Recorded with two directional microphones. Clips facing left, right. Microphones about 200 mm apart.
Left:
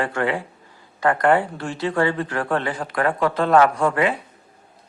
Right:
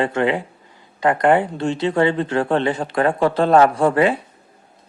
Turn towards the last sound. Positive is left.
turn(degrees=-30)  # may be behind; listen again after turning